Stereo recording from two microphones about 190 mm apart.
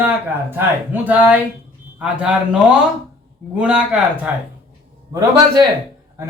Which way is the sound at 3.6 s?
5° right (ahead or behind).